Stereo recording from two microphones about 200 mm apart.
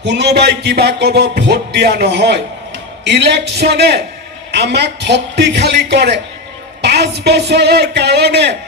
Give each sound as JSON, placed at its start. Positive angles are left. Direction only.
{"t": 0.0, "sound": "music", "side_deg": -55}
{"t": 3.0, "sound": "speech", "side_deg": -55}